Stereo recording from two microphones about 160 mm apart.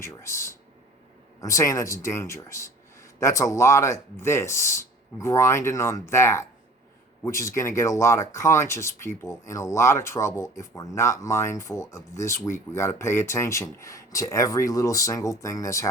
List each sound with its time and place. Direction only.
0.0 s speech: 15° left (ahead or behind)